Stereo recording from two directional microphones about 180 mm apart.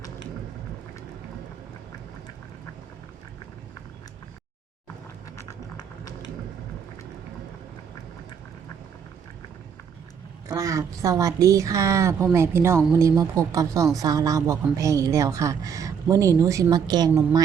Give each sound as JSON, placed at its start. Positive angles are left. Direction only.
{"t": 10.5, "sound": "a woman's voice", "side_deg": -20}